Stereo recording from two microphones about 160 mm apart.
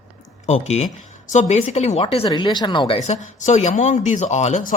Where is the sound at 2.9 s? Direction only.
45° left (ahead or behind).